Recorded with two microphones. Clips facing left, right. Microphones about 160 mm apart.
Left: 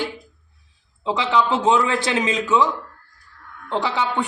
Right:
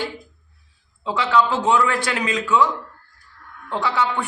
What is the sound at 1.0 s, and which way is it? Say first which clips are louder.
A man's voice: right 1 dB; 20° left (ahead or behind).